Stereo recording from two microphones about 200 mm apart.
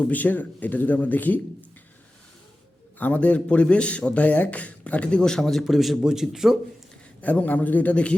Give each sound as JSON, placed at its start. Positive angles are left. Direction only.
{"t": 0.1, "sound": "speech", "side_deg": 10}
{"t": 3.0, "sound": "speech", "side_deg": 5}